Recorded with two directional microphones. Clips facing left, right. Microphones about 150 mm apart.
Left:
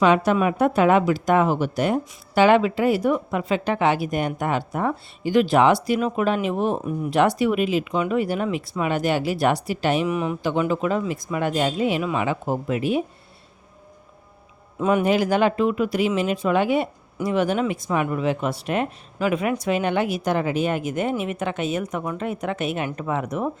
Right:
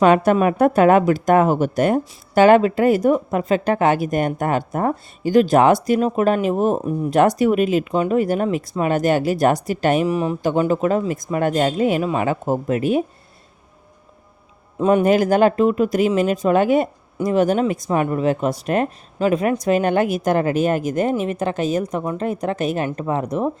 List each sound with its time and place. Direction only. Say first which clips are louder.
0.0 s speech: right 4 dB; 50° right (ahead or behind)
10.1 s speech: right 4 dB; 35° right (ahead or behind)
14.8 s speech: right 4 dB; 30° right (ahead or behind)
15.0 s speech: right 5 dB; 45° right (ahead or behind)